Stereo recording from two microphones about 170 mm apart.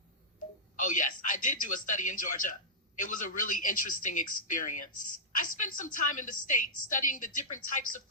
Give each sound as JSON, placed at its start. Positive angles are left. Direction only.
{"t": 0.8, "sound": "a woman's voice", "side_deg": 50}